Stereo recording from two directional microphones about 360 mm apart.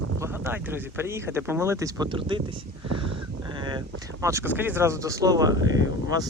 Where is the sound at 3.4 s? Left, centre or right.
Centre.